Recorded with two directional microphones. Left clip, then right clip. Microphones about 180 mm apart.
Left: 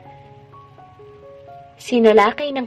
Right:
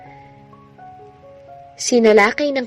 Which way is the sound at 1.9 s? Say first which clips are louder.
Right 1 dB; 40° right (ahead or behind).